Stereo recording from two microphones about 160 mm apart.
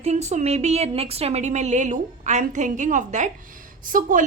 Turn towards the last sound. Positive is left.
turn(degrees=-55)  # may be behind; listen again after turning